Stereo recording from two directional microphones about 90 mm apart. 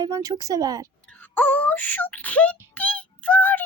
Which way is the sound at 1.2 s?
20° left (ahead or behind).